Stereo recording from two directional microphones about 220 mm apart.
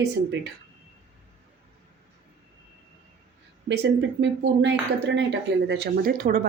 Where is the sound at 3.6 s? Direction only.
55° right (ahead or behind).